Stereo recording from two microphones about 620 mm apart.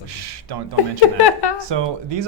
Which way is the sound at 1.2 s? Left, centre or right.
Left.